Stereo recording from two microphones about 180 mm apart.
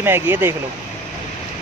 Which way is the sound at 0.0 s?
10° right (ahead or behind).